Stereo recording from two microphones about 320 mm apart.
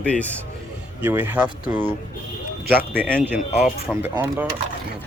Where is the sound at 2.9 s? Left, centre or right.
Centre.